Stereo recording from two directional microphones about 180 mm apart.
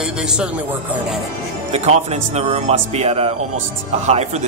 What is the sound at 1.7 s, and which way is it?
Speech, 35° right (ahead or behind).